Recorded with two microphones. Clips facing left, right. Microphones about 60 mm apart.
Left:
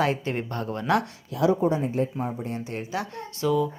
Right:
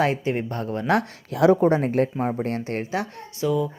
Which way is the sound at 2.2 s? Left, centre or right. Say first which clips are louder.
Right 5 dB; right.